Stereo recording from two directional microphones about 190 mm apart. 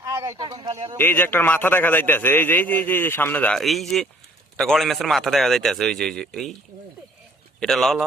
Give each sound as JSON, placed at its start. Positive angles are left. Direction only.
{"t": 0.2, "sound": "speech", "side_deg": -20}
{"t": 0.9, "sound": "a man's voice", "side_deg": 10}
{"t": 7.6, "sound": "a man's voice", "side_deg": 0}